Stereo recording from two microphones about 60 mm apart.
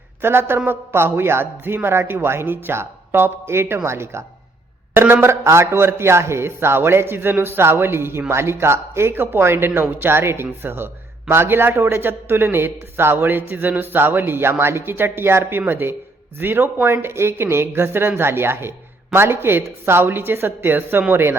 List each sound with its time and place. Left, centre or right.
0.2 s a man's voice: right
5.4 s a man's voice: right